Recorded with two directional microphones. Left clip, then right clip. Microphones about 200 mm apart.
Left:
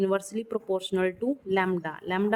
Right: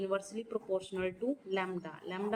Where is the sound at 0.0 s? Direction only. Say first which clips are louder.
Left 8 dB; 50° left (ahead or behind).